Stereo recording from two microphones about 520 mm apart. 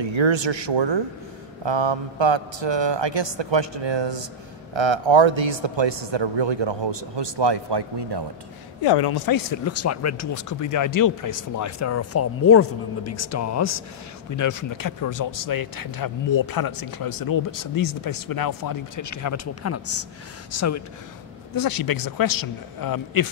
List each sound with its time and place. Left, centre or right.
0.0 s speech: right
8.8 s speech: left
21.5 s speech: left